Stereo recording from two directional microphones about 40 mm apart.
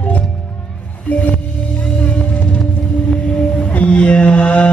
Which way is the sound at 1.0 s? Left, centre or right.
Left.